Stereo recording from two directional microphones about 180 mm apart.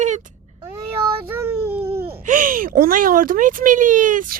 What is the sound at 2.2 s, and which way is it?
Speech, 50° right (ahead or behind).